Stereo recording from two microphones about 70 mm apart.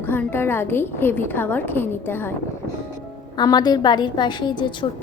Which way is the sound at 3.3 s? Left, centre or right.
Left.